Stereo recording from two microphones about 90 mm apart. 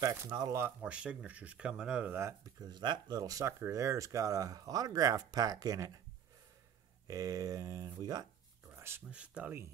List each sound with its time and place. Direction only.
0.0 s speech: 30° right (ahead or behind); by 2.0 s 10° right (ahead or behind)
2.0 s speech: 30° right (ahead or behind)
2.6 s speech: 55° right (ahead or behind)
7.1 s speech: 40° right (ahead or behind)
8.7 s a sound: 25° right (ahead or behind)
9.1 s speech: 15° right (ahead or behind)